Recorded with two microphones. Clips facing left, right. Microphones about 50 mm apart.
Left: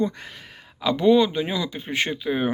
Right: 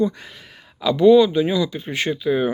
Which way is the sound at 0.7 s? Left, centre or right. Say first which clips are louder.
Right 5 dB; left.